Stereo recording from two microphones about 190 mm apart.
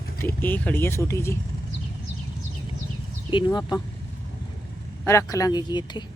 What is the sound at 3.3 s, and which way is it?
Speech, 25° left (ahead or behind).